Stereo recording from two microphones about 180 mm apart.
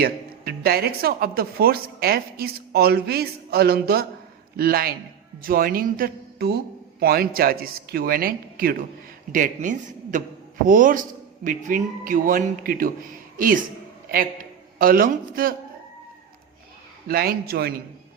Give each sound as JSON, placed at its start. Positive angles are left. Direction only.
{"t": 0.0, "sound": "a man's voice", "side_deg": -60}
{"t": 14.8, "sound": "a man's voice", "side_deg": -55}
{"t": 17.1, "sound": "speech", "side_deg": -60}